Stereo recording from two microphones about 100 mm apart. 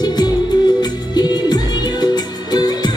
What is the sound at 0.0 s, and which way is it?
Music, 45° left (ahead or behind).